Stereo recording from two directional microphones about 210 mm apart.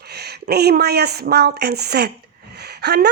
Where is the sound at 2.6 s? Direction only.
50° right (ahead or behind).